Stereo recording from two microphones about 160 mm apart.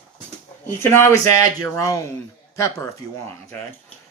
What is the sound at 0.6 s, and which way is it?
Speech, 15° left (ahead or behind).